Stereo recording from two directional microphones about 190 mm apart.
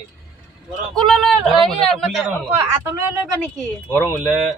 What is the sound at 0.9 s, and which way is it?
A man's voice, centre (ahead or behind).